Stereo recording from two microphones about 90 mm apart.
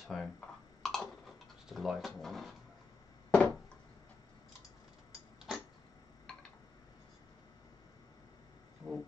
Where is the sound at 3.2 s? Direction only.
10° left (ahead or behind).